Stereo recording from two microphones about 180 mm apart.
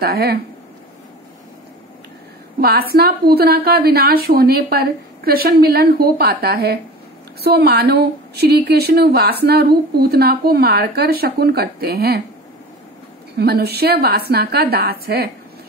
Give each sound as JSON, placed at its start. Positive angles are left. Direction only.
{"t": 0.0, "sound": "speech", "side_deg": -60}
{"t": 2.6, "sound": "speech", "side_deg": -60}
{"t": 13.4, "sound": "speech", "side_deg": -60}